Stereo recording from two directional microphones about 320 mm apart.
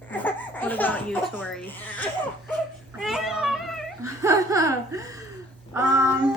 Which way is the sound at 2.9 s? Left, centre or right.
Centre.